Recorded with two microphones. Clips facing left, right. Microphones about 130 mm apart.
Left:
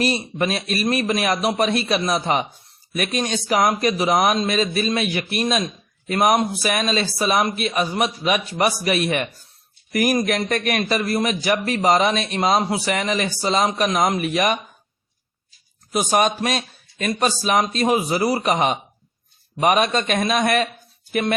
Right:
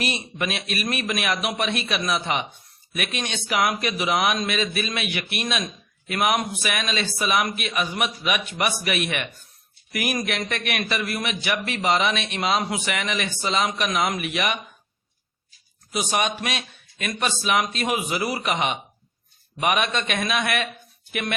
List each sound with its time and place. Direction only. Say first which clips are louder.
0.0 s a man's voice: left 6 dB; 35° left (ahead or behind)
15.9 s a man's voice: left 6 dB; 45° left (ahead or behind)